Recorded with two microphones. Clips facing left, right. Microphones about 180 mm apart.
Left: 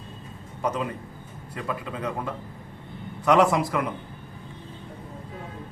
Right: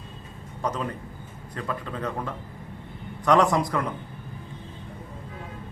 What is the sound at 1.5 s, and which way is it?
A man's voice, 5° left (ahead or behind).